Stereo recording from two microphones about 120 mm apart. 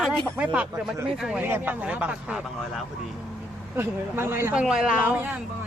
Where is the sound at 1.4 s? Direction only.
15° right (ahead or behind).